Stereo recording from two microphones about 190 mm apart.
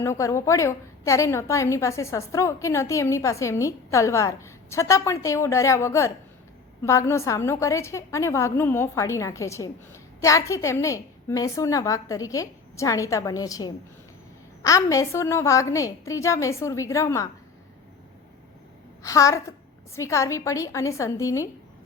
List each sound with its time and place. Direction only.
0.0 s a woman's voice: 15° left (ahead or behind)
19.0 s a woman's voice: 15° left (ahead or behind)